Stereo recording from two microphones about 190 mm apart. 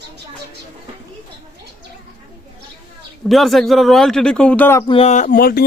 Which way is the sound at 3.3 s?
Centre (ahead or behind).